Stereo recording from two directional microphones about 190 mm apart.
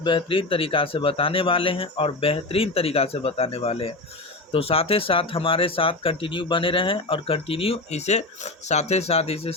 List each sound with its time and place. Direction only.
0.0 s speech: 25° left (ahead or behind)